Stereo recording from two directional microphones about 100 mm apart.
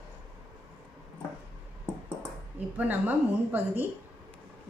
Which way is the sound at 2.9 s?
20° right (ahead or behind).